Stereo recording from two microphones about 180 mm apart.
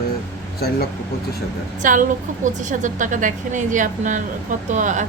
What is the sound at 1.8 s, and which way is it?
A woman's voice, 45° right (ahead or behind).